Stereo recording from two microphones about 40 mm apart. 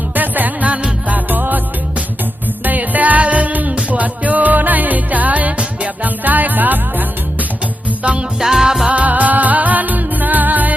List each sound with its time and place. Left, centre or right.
0.1 s music: right
2.6 s music: right
8.4 s music: centre
8.9 s music: right